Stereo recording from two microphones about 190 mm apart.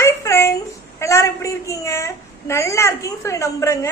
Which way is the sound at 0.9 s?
15° left (ahead or behind).